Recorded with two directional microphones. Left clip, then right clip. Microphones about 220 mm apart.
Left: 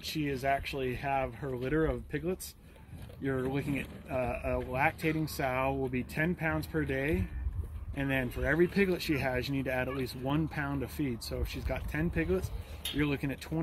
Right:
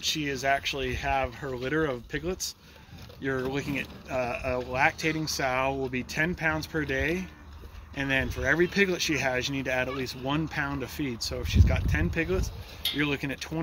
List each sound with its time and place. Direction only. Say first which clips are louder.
0.0 s speech: right 5 dB; centre (ahead or behind)